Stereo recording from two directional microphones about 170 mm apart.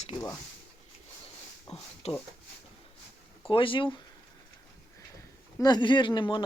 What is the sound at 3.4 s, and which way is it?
Speech, 30° left (ahead or behind).